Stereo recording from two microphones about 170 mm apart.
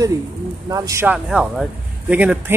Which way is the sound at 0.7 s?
20° right (ahead or behind).